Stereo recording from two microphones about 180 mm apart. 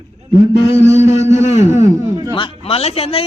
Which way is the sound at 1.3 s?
40° left (ahead or behind).